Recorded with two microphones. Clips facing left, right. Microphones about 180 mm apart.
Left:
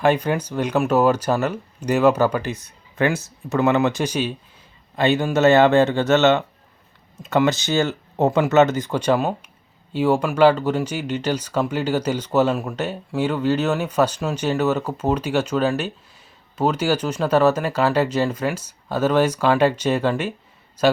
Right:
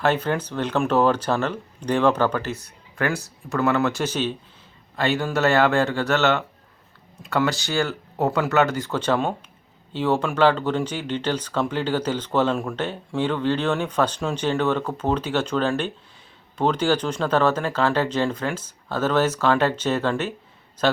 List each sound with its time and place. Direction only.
0.0 s a man's voice: 15° left (ahead or behind)